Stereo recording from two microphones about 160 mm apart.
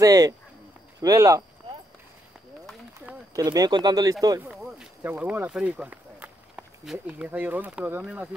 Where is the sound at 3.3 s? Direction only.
25° right (ahead or behind).